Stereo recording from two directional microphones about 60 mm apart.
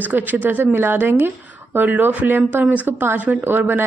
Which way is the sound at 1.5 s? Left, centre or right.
Right.